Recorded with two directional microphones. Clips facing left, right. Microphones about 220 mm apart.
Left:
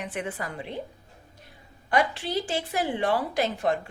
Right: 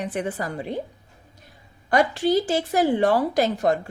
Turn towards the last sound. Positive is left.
turn(degrees=-40)  # may be behind; listen again after turning